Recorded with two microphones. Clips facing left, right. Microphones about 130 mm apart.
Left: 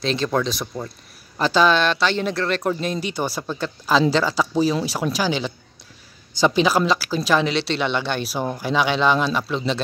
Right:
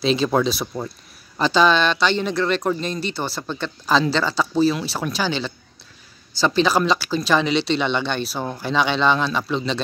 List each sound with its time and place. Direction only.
0.0 s speech: 10° right (ahead or behind)
1.4 s speech: 5° left (ahead or behind)